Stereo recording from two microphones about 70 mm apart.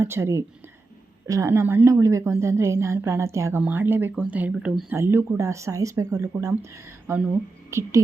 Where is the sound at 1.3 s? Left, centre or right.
Right.